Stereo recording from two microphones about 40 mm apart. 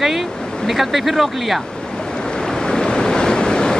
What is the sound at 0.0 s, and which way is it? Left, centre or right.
Speech, centre.